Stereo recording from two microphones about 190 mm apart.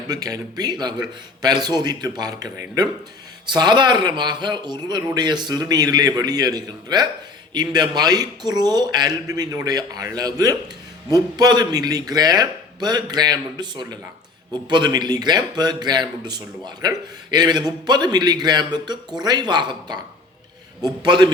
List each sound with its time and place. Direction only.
0.1 s speech: 20° right (ahead or behind)